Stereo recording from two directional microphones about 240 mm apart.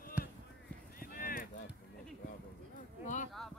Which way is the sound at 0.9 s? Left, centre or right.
Left.